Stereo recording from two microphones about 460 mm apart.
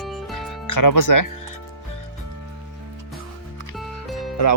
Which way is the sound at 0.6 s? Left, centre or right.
Left.